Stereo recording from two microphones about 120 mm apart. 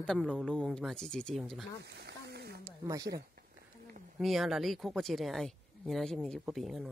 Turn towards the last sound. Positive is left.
turn(degrees=0)  # may be behind; listen again after turning